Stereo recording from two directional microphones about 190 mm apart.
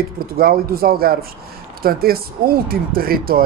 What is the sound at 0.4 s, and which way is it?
Speech, 50° right (ahead or behind).